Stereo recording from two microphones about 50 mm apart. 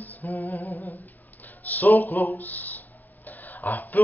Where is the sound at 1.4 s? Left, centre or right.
Left.